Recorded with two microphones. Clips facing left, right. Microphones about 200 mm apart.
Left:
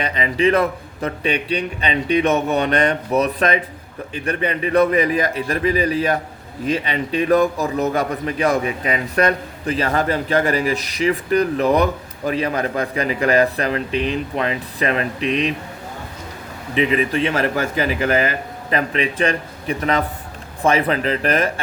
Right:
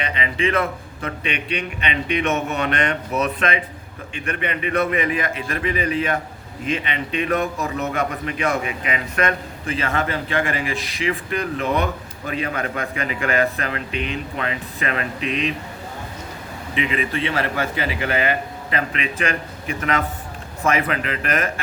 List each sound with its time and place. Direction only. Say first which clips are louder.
0.0 s a man's voice: left 5 dB; 40° left (ahead or behind)
16.7 s a man's voice: left 5 dB; 40° left (ahead or behind)